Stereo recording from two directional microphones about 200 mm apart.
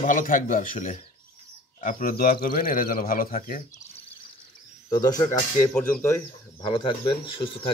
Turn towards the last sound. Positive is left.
turn(degrees=25)  # may be behind; listen again after turning